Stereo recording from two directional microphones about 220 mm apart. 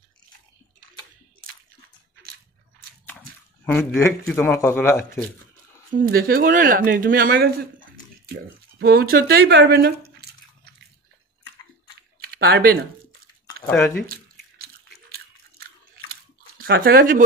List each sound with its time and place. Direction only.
3.6 s speech: 10° left (ahead or behind)
5.9 s speech: 40° right (ahead or behind)
12.4 s speech: 45° right (ahead or behind)
14.0 s drip: 40° right (ahead or behind)
15.6 s chewing: 45° right (ahead or behind)